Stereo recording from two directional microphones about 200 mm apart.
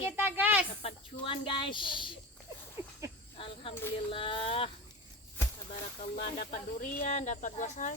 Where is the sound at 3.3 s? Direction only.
25° left (ahead or behind).